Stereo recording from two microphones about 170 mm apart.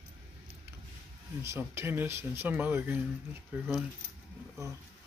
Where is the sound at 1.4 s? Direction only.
15° right (ahead or behind).